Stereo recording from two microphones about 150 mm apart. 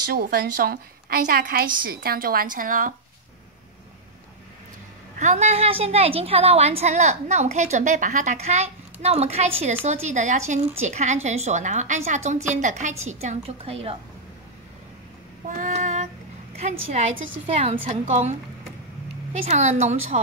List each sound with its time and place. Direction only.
0.1 s a woman's voice: 90° right; by 2.9 s 65° right (ahead or behind)
5.2 s a woman's voice: 50° right (ahead or behind)
15.4 s female singing: 60° right (ahead or behind)
16.5 s a woman's voice: 45° right (ahead or behind)
19.4 s a woman's voice: 45° right (ahead or behind)